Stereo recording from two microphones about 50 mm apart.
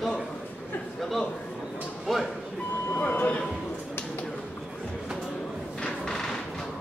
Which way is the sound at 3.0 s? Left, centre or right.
Left.